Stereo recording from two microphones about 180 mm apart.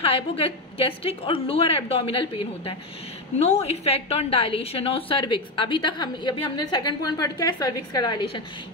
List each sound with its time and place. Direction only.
0.0 s a woman's voice: 30° left (ahead or behind)